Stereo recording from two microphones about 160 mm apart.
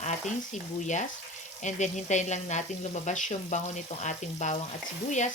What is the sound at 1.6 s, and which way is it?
Speech, 50° left (ahead or behind).